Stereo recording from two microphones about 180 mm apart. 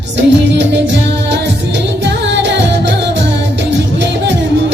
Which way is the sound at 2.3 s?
80° right.